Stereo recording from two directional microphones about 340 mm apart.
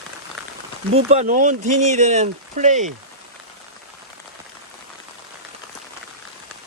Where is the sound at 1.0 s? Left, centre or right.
Right.